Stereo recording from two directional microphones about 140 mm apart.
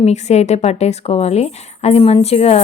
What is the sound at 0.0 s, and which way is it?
Speech, 50° left (ahead or behind).